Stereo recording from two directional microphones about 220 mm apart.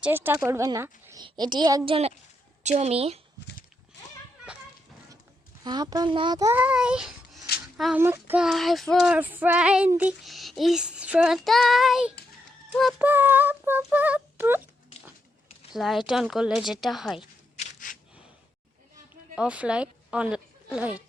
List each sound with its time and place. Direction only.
0.0 s a woman's voice: 10° right (ahead or behind); by 3.2 s 25° right (ahead or behind)
5.6 s a woman's voice: 20° right (ahead or behind)
7.8 s child singing: 5° right (ahead or behind)
12.7 s a woman's voice: 5° right (ahead or behind)
15.7 s child singing: centre (ahead or behind)
17.2 s a sound: 35° left (ahead or behind)
19.4 s a woman's voice: 5° right (ahead or behind)